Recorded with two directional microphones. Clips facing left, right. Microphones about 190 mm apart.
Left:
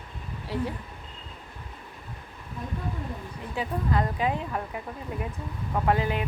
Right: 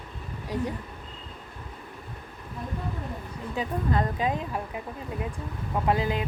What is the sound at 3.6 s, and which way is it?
Speech, 25° right (ahead or behind).